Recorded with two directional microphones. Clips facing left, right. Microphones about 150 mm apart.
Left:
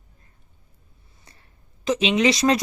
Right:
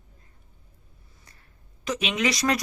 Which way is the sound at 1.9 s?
25° left (ahead or behind).